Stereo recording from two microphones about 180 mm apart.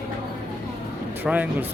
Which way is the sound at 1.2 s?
10° right (ahead or behind).